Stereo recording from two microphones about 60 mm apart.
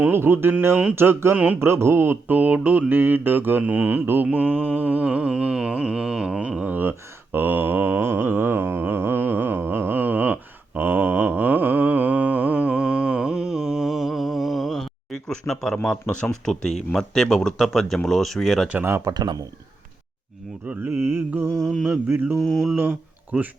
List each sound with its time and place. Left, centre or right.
0.0 s speech: right
3.6 s mantra: right
6.6 s a sound: right
7.3 s mantra: right
10.8 s humming: right; by 16.0 s centre
16.5 s speech: centre
18.8 s speech: right
20.7 s speech: right
21.1 s mantra: right
22.0 s speech: right
22.4 s speech: centre
22.7 s speech: right